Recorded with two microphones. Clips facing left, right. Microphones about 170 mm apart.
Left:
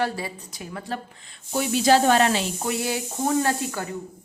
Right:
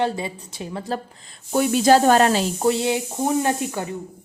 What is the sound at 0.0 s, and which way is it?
Speech, 20° right (ahead or behind).